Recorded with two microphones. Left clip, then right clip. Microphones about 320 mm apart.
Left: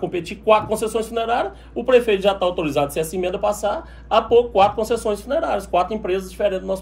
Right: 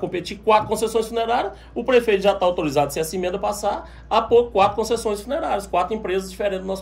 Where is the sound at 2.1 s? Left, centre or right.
Right.